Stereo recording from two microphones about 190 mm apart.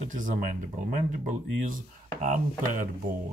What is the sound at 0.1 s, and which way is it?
Speech, 45° right (ahead or behind).